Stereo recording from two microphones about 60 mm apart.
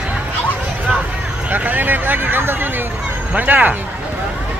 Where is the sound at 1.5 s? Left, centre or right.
Right.